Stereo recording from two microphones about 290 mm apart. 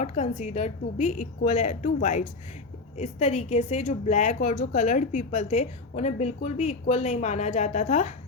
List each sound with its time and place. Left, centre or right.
0.0 s a woman's voice: left